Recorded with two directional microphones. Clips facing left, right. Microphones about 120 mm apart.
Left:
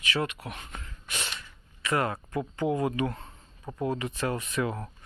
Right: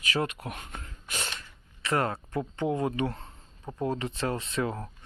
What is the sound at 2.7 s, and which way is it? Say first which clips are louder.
Speech: left 1 dB; 25° right (ahead or behind).